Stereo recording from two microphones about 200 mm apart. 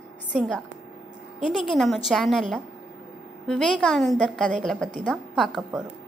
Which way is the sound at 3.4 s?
Centre (ahead or behind).